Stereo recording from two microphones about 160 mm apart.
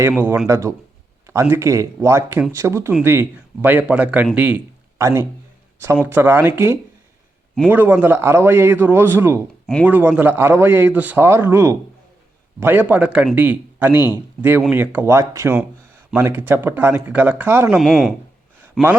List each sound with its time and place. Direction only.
0.1 s speech: 10° right (ahead or behind)
4.4 s a sound: 10° right (ahead or behind)
5.8 s speech: 15° right (ahead or behind)
17.7 s speech: centre (ahead or behind)